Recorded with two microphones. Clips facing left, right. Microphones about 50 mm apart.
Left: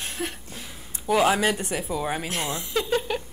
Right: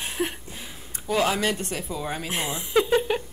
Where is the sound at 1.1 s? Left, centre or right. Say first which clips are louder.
Left 3 dB; centre.